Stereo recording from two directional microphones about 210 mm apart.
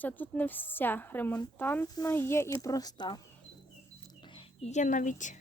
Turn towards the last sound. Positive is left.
turn(degrees=35)  # may be behind; listen again after turning